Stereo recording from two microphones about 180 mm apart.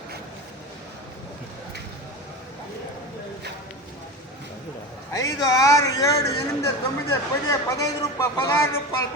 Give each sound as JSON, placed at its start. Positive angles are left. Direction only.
{"t": 5.1, "sound": "speech", "side_deg": 20}